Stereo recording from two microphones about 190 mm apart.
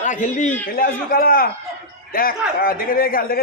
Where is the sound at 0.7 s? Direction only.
50° left (ahead or behind).